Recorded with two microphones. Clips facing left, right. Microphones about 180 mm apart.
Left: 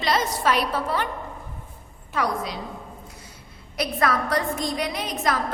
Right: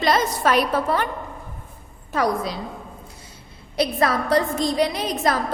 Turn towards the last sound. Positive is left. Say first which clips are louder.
# right 3 dB
turn(degrees=-35)  # may be behind; listen again after turning